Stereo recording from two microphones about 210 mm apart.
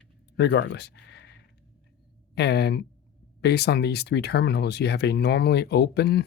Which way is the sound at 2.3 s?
50° left (ahead or behind).